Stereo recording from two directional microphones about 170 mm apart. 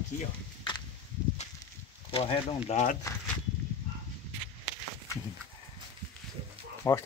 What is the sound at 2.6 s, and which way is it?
Speech, 45° left (ahead or behind).